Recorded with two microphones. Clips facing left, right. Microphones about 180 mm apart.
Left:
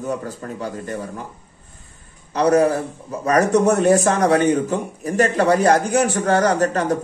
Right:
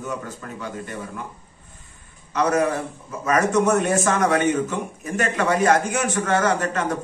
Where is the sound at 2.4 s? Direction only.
35° left (ahead or behind).